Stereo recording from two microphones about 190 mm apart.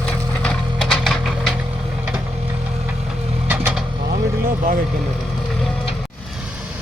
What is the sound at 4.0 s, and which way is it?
Vehicle, 55° right (ahead or behind).